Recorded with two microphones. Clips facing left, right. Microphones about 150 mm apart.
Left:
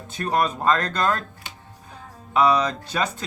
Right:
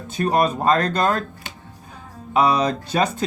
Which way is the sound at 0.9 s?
15° right (ahead or behind).